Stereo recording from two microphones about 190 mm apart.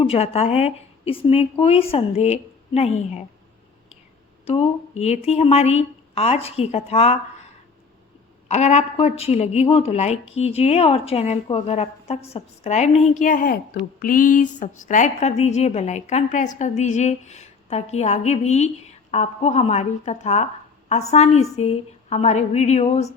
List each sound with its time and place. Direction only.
0.0 s a woman's voice: 30° left (ahead or behind)
4.4 s a woman's voice: 30° left (ahead or behind)
8.4 s a woman's voice: 35° left (ahead or behind)
14.0 s a sound: 45° left (ahead or behind)
14.8 s a woman's voice: 40° left (ahead or behind)